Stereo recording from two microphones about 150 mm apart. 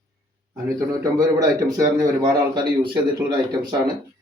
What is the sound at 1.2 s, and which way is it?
A man's voice, 25° right (ahead or behind).